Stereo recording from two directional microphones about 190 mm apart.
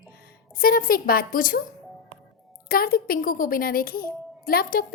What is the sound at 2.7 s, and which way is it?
A woman's voice, 50° left (ahead or behind).